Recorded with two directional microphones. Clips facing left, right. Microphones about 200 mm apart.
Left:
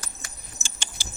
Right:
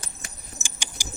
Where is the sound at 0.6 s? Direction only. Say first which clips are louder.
Even; 15° right (ahead or behind).